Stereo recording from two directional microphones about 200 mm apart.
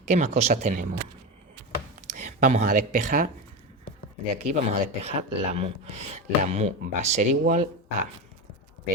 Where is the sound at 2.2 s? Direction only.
35° right (ahead or behind).